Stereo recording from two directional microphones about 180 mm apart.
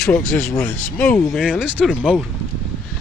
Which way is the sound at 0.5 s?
5° left (ahead or behind).